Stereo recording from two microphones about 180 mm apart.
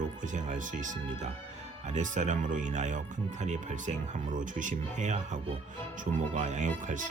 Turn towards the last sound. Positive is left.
turn(degrees=-45)  # may be behind; listen again after turning